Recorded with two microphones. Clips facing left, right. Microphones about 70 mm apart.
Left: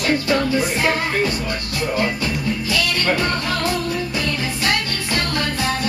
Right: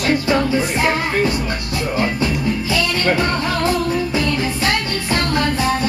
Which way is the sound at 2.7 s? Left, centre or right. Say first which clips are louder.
Right 2 dB; right.